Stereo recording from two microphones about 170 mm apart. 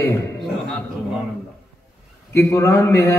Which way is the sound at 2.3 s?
15° left (ahead or behind).